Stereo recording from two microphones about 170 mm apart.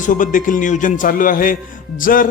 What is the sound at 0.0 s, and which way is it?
Speech, 50° left (ahead or behind).